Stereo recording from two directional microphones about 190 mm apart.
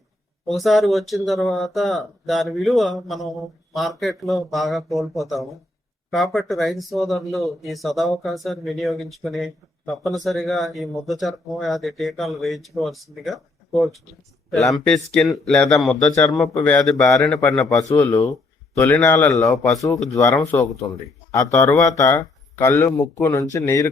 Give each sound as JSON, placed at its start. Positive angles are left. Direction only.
{"t": 0.4, "sound": "speech", "side_deg": 0}
{"t": 16.1, "sound": "speech", "side_deg": 15}
{"t": 16.6, "sound": "speech", "side_deg": 5}
{"t": 17.9, "sound": "speech", "side_deg": 15}